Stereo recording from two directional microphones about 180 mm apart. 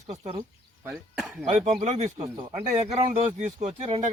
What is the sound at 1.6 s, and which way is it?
Speech, 40° right (ahead or behind).